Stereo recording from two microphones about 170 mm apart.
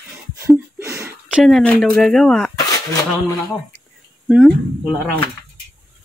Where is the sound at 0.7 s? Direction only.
15° right (ahead or behind).